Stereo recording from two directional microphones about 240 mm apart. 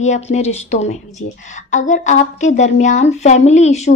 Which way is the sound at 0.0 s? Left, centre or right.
Left.